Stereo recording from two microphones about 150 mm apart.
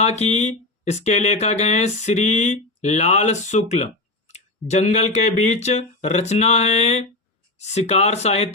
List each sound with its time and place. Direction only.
0.0 s speech: 50° left (ahead or behind)